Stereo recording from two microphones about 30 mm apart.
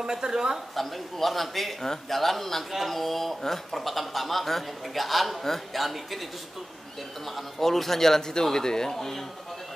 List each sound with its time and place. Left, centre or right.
0.0 s a woman's voice: centre
0.7 s a man's voice: centre
7.2 s a man's voice: centre